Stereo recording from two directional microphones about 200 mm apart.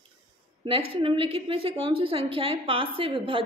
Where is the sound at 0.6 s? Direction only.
25° right (ahead or behind).